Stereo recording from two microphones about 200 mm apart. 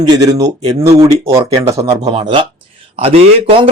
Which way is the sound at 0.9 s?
15° right (ahead or behind).